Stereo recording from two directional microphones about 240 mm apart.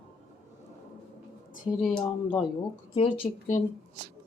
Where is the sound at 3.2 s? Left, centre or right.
Left.